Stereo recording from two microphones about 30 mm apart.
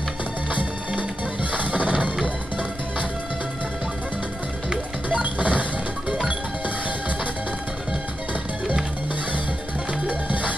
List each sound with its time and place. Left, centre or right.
0.5 s music: right
5.1 s music: right